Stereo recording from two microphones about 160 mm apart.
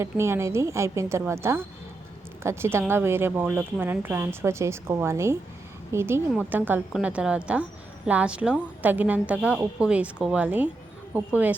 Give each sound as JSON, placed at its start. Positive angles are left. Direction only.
{"t": 0.0, "sound": "a woman's voice", "side_deg": -15}